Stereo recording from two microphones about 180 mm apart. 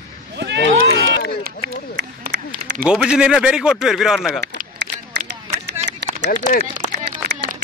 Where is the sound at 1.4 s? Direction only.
60° right (ahead or behind).